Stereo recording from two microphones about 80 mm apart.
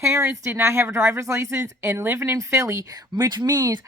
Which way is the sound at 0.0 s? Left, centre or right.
Right.